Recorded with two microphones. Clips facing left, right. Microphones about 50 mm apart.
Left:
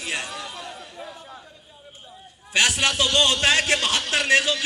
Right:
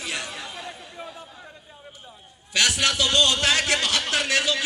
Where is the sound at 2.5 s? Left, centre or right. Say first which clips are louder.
Left 1 dB; left.